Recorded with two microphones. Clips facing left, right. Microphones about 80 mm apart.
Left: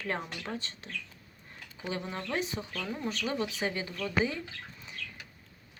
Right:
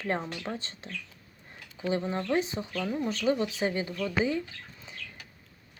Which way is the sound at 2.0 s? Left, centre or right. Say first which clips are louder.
Right 5 dB; right.